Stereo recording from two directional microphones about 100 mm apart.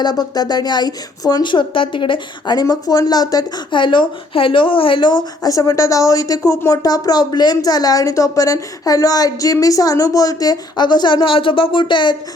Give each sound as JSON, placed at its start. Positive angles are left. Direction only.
{"t": 0.0, "sound": "a woman's voice", "side_deg": 40}